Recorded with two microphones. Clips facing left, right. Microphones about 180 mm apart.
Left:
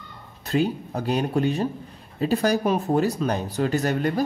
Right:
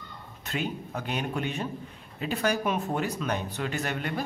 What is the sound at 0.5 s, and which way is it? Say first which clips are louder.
A man's voice: left 9 dB; 35° left (ahead or behind).